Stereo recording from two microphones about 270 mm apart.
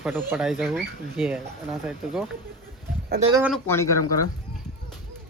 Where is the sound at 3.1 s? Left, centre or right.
Right.